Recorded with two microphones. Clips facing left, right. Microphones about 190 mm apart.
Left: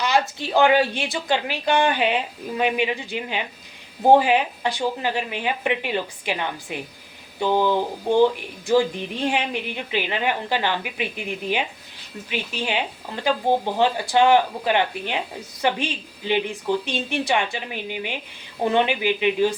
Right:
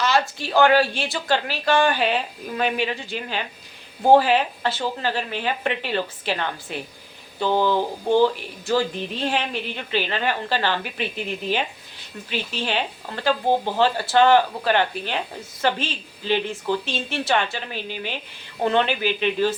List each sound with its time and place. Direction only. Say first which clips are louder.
0.0 s speech: even; 20° left (ahead or behind)